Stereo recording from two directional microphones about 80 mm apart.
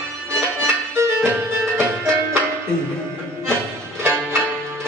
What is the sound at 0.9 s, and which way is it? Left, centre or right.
Music, right.